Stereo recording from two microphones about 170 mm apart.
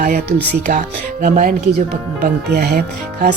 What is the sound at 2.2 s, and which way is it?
Speech, 75° right (ahead or behind).